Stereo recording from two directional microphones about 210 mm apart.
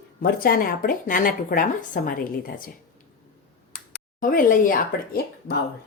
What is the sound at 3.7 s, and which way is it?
Speech, 45° left (ahead or behind).